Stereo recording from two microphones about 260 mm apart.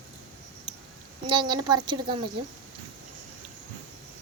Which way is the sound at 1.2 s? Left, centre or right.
Centre.